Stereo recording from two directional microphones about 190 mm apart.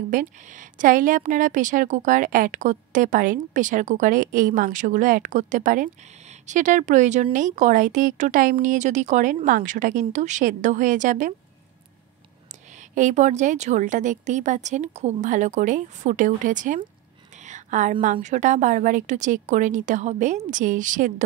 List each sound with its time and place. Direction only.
0.1 s a woman's voice: 45° right (ahead or behind)
12.9 s speech: 40° right (ahead or behind)
17.5 s a sound: 40° right (ahead or behind)
18.0 s speech: 40° right (ahead or behind)